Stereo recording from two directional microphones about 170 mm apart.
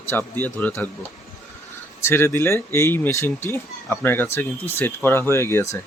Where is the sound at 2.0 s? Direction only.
15° left (ahead or behind).